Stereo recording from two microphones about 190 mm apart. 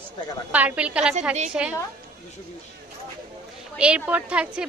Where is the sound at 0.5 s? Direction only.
5° right (ahead or behind).